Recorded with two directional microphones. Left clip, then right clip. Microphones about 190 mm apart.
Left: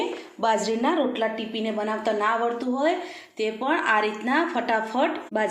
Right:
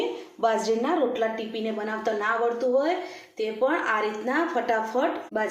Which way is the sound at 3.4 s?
20° left (ahead or behind).